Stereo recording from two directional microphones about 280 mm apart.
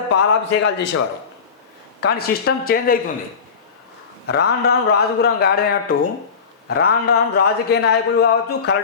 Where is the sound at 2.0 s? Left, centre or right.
Left.